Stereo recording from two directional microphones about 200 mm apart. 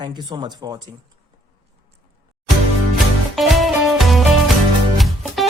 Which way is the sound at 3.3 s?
Centre (ahead or behind).